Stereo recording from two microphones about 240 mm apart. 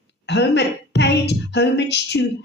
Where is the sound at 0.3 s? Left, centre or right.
Left.